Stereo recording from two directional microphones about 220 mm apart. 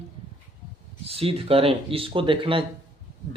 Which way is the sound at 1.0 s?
25° right (ahead or behind).